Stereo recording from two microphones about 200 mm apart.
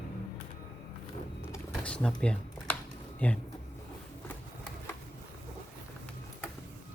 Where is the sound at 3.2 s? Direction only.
10° left (ahead or behind).